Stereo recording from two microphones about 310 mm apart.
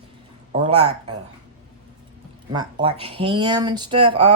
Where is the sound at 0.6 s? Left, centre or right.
Centre.